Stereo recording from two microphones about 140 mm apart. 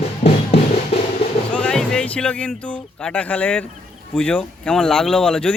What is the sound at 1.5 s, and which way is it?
Music, 5° left (ahead or behind).